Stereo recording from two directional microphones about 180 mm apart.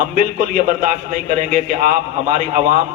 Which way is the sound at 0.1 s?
45° right (ahead or behind).